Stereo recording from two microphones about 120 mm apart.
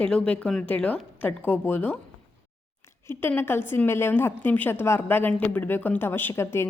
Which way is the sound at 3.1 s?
20° left (ahead or behind).